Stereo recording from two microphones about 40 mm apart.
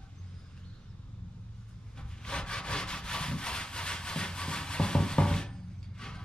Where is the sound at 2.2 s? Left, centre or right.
Left.